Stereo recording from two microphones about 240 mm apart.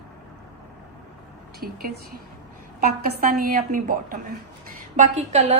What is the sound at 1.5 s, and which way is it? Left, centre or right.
Speech, right.